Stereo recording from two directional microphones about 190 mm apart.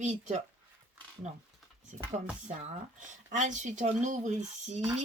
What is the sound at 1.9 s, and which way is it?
Speech, 35° right (ahead or behind).